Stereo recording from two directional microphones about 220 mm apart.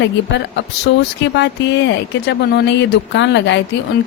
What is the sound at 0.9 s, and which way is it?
A woman's voice, 50° left (ahead or behind).